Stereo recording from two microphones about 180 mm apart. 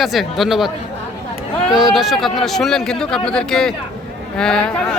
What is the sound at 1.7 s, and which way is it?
Speech, centre (ahead or behind).